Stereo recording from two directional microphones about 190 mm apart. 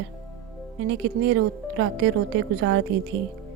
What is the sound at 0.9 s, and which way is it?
Speech, 70° right (ahead or behind).